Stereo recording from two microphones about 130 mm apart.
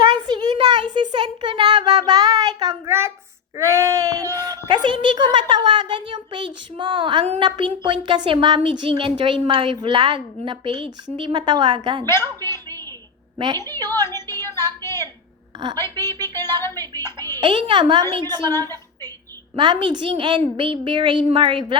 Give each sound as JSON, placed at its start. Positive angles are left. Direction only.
{"t": 0.3, "sound": "a sound", "side_deg": -35}
{"t": 1.1, "sound": "child singing", "side_deg": -35}
{"t": 3.6, "sound": "a child's voice", "side_deg": -20}
{"t": 12.0, "sound": "a woman's voice", "side_deg": 20}
{"t": 13.6, "sound": "a woman's voice", "side_deg": 20}
{"t": 14.3, "sound": "music", "side_deg": 20}
{"t": 16.2, "sound": "a sound", "side_deg": 20}
{"t": 17.0, "sound": "music", "side_deg": 20}
{"t": 17.4, "sound": "a woman's voice", "side_deg": -40}